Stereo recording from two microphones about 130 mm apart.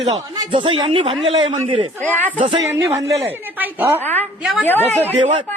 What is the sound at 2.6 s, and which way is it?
A man's voice, 25° right (ahead or behind).